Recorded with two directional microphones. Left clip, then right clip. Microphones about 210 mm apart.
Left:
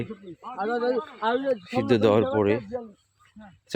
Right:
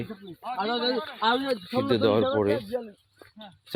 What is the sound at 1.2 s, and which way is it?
Speech, 45° right (ahead or behind).